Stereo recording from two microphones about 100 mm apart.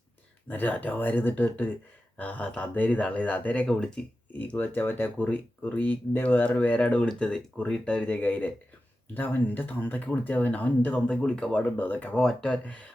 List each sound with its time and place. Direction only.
0.4 s speech: 20° left (ahead or behind)
4.3 s speech: 15° left (ahead or behind)